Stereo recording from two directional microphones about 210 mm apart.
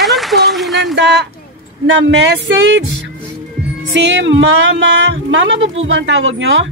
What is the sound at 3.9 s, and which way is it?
Speech, 60° right (ahead or behind).